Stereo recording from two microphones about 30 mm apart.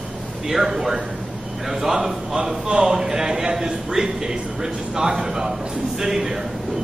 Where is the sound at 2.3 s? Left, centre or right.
Right.